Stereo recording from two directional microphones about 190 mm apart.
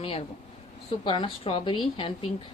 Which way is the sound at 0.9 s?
25° left (ahead or behind).